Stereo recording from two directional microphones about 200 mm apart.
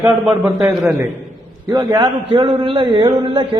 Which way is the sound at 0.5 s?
15° right (ahead or behind).